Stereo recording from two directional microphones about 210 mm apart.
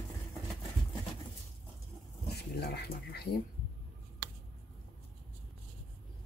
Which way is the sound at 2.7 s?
50° left (ahead or behind).